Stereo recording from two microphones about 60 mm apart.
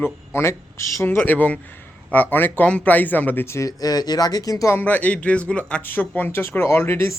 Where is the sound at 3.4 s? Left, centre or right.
Left.